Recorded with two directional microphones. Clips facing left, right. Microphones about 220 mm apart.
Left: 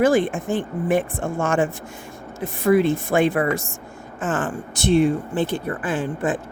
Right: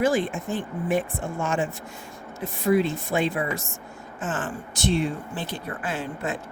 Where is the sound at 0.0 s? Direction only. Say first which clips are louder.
Left 5 dB; 50° left (ahead or behind).